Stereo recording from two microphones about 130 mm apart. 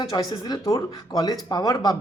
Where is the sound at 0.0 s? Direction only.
30° left (ahead or behind).